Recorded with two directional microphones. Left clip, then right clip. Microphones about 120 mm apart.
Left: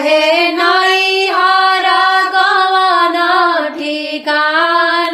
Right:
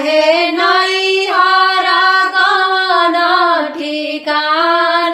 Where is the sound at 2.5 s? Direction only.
15° left (ahead or behind).